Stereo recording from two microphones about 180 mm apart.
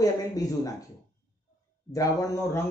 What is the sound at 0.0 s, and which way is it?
Speech, 20° left (ahead or behind).